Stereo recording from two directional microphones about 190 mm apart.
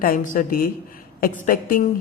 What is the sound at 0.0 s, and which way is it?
A woman's voice, 50° left (ahead or behind).